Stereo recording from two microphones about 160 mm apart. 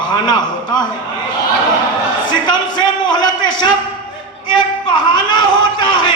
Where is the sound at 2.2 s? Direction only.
30° left (ahead or behind).